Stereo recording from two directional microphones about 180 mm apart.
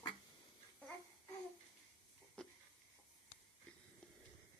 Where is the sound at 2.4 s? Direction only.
5° left (ahead or behind).